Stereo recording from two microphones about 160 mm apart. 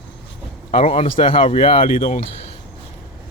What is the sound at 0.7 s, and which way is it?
Speech, 40° left (ahead or behind).